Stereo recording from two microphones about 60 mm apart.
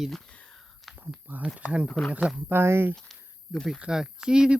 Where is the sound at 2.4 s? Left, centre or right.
Right.